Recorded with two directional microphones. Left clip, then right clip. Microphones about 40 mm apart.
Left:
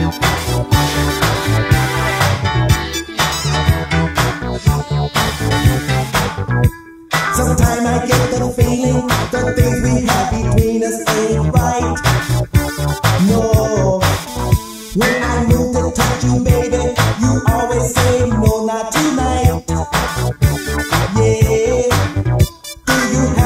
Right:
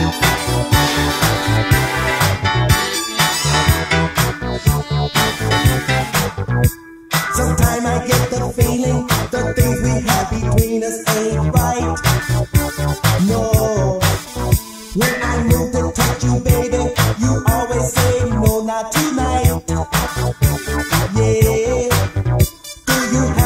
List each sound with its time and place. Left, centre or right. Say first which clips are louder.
0.0 s music: right 1 dB; left